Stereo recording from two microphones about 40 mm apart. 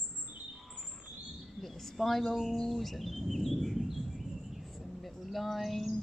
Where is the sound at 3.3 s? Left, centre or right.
Centre.